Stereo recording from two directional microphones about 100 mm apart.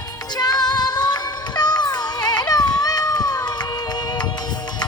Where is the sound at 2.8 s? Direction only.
40° left (ahead or behind).